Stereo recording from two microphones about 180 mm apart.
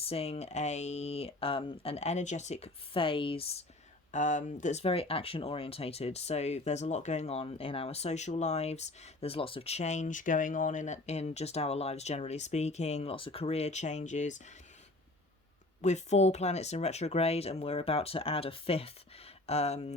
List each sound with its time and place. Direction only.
0.0 s speech: 35° left (ahead or behind)
4.1 s speech: 45° left (ahead or behind)
15.8 s speech: 40° left (ahead or behind)